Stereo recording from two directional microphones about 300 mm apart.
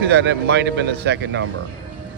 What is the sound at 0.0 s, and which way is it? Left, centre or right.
Speech, right.